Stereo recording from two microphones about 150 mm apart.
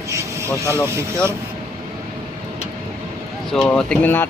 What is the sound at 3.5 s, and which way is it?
Speech, 5° left (ahead or behind).